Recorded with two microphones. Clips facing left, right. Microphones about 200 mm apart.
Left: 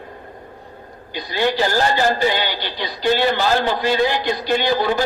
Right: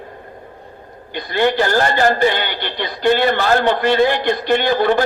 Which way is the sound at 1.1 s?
55° right (ahead or behind).